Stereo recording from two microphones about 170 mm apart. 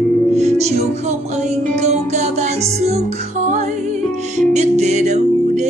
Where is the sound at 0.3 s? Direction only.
40° right (ahead or behind).